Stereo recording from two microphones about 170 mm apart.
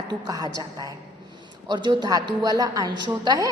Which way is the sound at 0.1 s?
20° right (ahead or behind).